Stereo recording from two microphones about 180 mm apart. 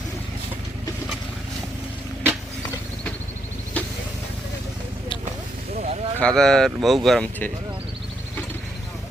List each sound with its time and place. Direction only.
3.8 s vehicle: 5° left (ahead or behind)
5.8 s a sound: 35° right (ahead or behind)
6.1 s speech: 5° left (ahead or behind)